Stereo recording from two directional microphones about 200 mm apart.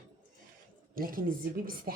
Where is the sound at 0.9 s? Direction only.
45° right (ahead or behind).